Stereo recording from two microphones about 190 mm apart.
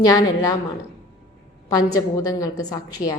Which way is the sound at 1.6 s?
20° left (ahead or behind).